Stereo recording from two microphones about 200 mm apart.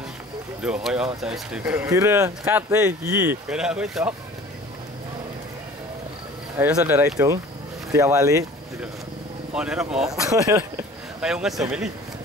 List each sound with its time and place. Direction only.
0.6 s speech: 5° right (ahead or behind)
3.4 s speech: 5° right (ahead or behind)
6.6 s speech: 10° right (ahead or behind)
9.5 s speech: 5° right (ahead or behind)
10.2 s speech: 15° right (ahead or behind)
11.1 s speech: 5° right (ahead or behind)